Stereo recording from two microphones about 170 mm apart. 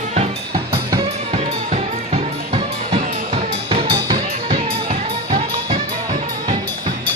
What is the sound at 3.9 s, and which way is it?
Music, 25° right (ahead or behind).